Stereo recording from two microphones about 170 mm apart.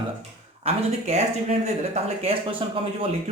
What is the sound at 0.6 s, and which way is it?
Speech, 40° right (ahead or behind).